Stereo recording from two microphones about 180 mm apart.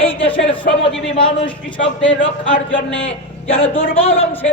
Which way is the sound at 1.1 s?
30° left (ahead or behind).